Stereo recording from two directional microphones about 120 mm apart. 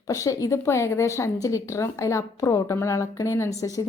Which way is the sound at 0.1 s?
25° left (ahead or behind).